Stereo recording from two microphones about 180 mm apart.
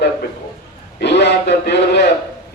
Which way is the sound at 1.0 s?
70° left (ahead or behind).